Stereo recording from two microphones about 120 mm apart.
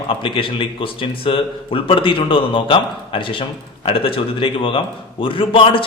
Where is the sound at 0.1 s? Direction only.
45° left (ahead or behind).